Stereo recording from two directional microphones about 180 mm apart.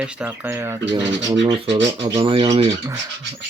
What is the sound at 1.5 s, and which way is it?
Speech, 35° right (ahead or behind).